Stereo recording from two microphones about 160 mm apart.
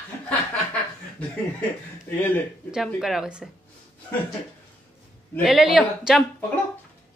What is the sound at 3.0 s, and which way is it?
Speech, 5° right (ahead or behind).